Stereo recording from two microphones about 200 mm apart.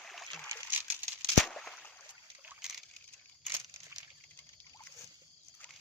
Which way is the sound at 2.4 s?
5° right (ahead or behind).